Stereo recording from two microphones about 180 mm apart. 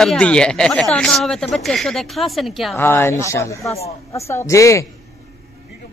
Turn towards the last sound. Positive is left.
turn(degrees=15)  # may be behind; listen again after turning